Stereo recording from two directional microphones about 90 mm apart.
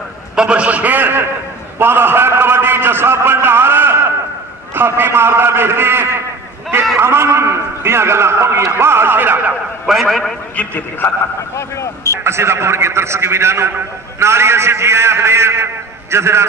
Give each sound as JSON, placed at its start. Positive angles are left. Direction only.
{"t": 0.4, "sound": "a man's voice", "side_deg": -15}
{"t": 1.8, "sound": "a sound", "side_deg": -25}
{"t": 4.7, "sound": "a man's voice", "side_deg": -25}
{"t": 9.8, "sound": "a man's voice", "side_deg": 0}
{"t": 10.5, "sound": "a man's voice", "side_deg": 20}
{"t": 12.2, "sound": "a man's voice", "side_deg": -30}